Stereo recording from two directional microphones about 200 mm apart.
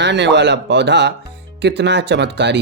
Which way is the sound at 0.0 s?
60° right (ahead or behind).